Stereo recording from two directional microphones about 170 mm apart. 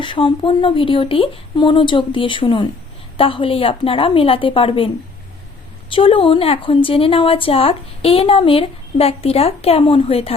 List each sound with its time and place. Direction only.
0.0 s a woman's voice: 30° left (ahead or behind)
5.9 s a woman's voice: 30° left (ahead or behind)